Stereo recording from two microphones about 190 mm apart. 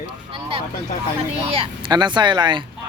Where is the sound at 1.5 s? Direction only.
25° right (ahead or behind).